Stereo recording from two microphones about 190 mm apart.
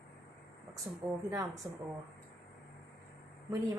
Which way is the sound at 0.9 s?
15° right (ahead or behind).